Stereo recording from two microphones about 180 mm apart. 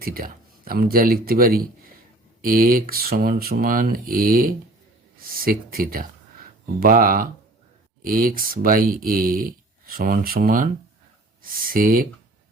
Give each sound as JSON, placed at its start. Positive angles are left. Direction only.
{"t": 0.0, "sound": "speech", "side_deg": -55}